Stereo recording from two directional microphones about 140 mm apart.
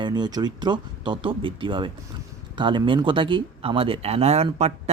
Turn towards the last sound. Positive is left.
turn(degrees=-45)  # may be behind; listen again after turning